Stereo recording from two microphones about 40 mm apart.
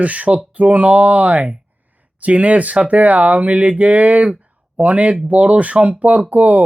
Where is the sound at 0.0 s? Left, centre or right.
Right.